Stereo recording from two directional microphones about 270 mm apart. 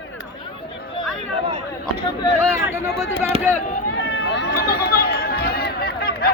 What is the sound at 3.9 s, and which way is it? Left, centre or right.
Run, left.